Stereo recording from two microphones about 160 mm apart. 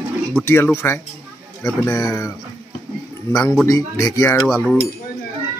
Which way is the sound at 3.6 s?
20° left (ahead or behind).